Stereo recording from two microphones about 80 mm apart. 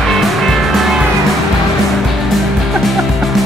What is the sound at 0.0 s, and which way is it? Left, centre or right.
Music, centre.